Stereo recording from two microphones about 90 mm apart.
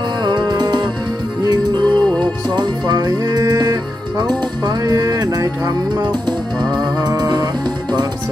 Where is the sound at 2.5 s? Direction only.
50° right (ahead or behind).